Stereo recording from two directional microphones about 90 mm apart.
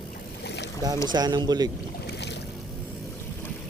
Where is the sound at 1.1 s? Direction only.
50° right (ahead or behind).